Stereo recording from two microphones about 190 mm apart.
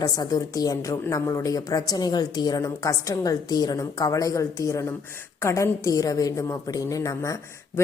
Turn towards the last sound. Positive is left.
turn(degrees=15)  # may be behind; listen again after turning